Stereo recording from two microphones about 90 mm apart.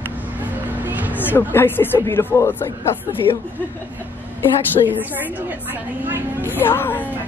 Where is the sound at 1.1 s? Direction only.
25° left (ahead or behind).